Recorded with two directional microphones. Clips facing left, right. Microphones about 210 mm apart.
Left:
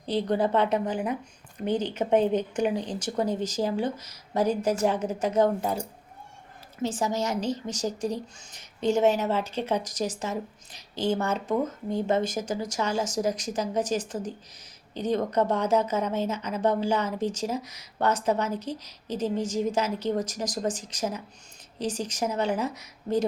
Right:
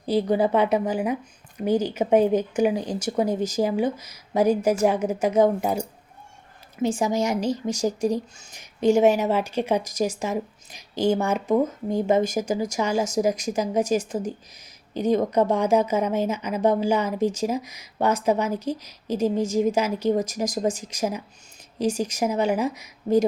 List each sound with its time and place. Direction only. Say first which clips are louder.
0.0 s a woman's voice: right 4 dB; 10° right (ahead or behind)
6.8 s a woman's voice: right 5 dB; 10° right (ahead or behind)